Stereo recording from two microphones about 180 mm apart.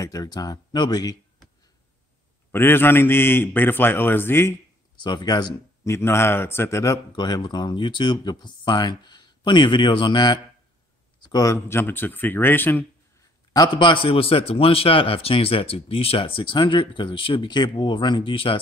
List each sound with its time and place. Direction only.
0.0 s speech: 20° left (ahead or behind)
2.5 s a man's voice: 10° left (ahead or behind)
5.0 s a man's voice: 25° left (ahead or behind)
13.5 s speech: 25° left (ahead or behind)